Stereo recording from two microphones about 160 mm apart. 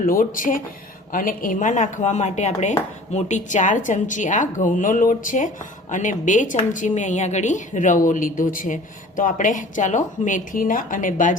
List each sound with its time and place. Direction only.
0.0 s a woman's voice: 60° left (ahead or behind)